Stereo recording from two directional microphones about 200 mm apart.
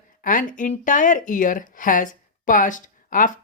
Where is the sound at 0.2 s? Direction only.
40° left (ahead or behind).